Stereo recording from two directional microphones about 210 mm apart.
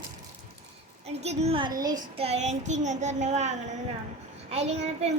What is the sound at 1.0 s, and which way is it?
Child singing, 30° right (ahead or behind).